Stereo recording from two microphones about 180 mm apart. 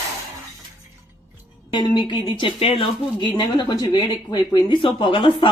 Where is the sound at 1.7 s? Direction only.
25° left (ahead or behind).